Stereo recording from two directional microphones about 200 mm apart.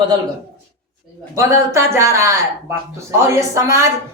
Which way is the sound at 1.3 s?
15° right (ahead or behind).